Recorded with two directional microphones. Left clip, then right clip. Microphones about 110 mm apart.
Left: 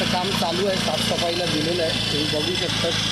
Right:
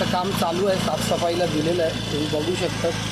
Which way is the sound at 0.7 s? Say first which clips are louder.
Even; 15° left (ahead or behind).